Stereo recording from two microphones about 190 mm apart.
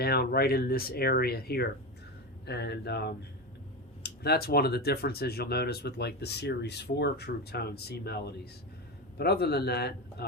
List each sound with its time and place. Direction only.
0.0 s speech: 55° left (ahead or behind)